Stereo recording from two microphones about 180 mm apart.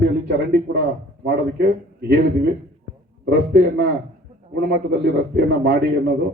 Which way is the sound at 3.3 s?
60° right (ahead or behind).